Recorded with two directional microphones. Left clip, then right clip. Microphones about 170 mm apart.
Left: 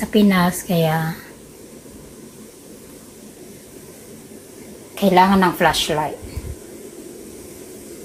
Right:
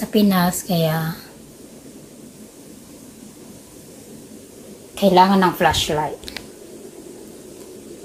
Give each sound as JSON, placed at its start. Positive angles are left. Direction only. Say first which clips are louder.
{"t": 0.0, "sound": "a woman's voice", "louder": "left 1 dB", "side_deg": 0}
{"t": 4.9, "sound": "a woman's voice", "louder": "even", "side_deg": 0}